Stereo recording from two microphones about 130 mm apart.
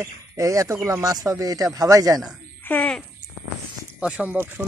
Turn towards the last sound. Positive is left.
turn(degrees=-10)  # may be behind; listen again after turning